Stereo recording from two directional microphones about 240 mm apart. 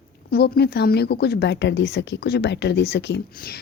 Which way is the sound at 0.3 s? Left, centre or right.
Left.